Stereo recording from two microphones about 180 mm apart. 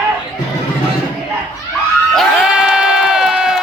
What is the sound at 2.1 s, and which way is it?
Crowd, 5° right (ahead or behind).